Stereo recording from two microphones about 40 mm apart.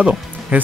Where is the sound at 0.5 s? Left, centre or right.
Right.